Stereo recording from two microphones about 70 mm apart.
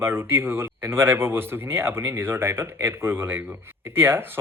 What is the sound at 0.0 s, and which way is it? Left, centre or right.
Speech, right.